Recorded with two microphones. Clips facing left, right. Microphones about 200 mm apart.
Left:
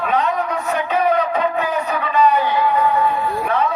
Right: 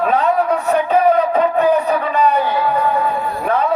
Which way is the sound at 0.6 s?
35° right (ahead or behind).